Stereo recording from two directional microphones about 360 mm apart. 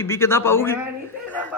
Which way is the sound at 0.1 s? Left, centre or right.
Centre.